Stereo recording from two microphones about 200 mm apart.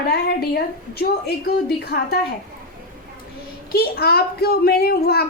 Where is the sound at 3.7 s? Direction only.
50° left (ahead or behind).